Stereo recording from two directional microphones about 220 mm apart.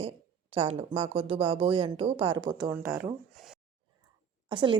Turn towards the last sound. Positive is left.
turn(degrees=-20)  # may be behind; listen again after turning